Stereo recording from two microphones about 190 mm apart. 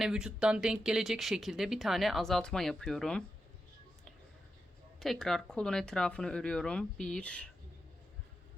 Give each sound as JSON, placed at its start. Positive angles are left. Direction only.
{"t": 0.0, "sound": "speech", "side_deg": -5}
{"t": 4.9, "sound": "speech", "side_deg": 0}